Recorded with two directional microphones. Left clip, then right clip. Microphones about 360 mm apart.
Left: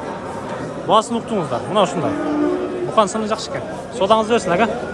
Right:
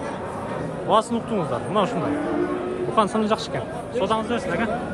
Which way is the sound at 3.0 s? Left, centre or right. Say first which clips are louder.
Left 4 dB; centre.